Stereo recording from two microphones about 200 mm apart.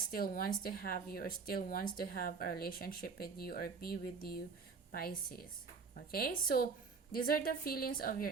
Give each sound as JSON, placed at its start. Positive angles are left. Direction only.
{"t": 0.1, "sound": "a woman's voice", "side_deg": 45}